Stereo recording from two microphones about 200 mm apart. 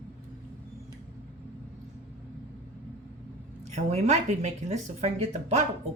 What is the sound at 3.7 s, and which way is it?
Speech, 35° right (ahead or behind).